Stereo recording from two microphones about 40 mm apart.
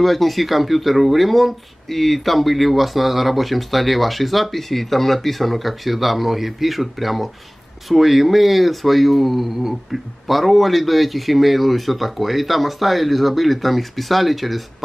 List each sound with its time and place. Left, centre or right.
0.0 s speech: centre